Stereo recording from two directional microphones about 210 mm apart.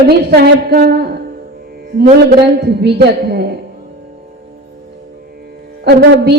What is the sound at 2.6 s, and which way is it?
Speech, 50° right (ahead or behind).